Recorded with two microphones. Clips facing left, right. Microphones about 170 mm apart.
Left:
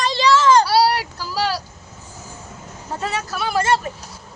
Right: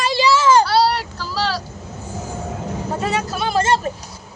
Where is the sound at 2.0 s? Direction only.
70° right (ahead or behind).